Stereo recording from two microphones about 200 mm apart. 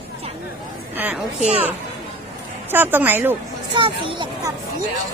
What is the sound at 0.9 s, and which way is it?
Speech, 10° right (ahead or behind).